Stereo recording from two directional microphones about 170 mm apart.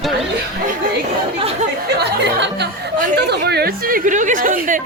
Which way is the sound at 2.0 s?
80° right.